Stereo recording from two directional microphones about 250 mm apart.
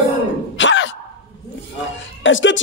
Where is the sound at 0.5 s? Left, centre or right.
Left.